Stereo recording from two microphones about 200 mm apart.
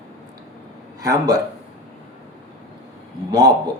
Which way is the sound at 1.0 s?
15° right (ahead or behind).